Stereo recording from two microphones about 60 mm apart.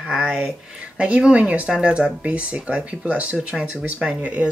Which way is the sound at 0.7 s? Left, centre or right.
Right.